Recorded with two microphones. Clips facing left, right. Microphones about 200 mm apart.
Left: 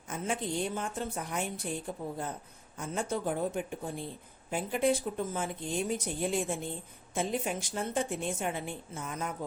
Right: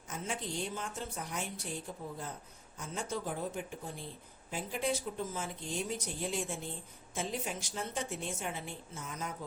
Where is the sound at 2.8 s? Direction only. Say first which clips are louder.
Left 5 dB; 55° left (ahead or behind).